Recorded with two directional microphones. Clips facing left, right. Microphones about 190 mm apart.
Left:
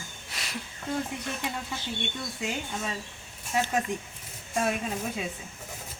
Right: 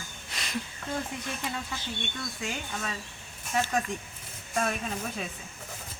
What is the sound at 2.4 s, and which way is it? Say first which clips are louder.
Speech: left 3 dB; 10° left (ahead or behind).